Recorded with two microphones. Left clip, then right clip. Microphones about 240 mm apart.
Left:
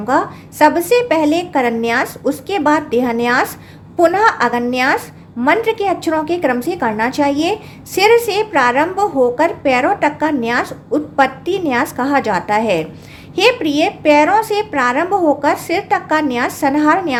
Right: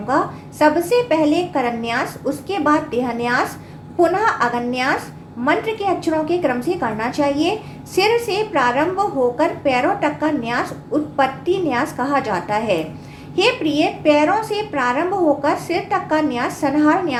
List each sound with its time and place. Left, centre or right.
0.1 s a woman's voice: left